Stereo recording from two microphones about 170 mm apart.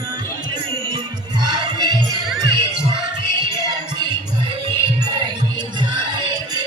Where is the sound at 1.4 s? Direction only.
25° right (ahead or behind).